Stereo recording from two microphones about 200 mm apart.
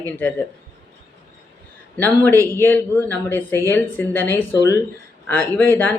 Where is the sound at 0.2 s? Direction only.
10° left (ahead or behind).